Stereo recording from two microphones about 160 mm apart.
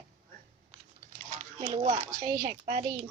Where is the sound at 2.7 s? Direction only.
50° right (ahead or behind).